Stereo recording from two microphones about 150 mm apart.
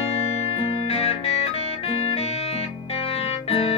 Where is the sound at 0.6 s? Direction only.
40° left (ahead or behind).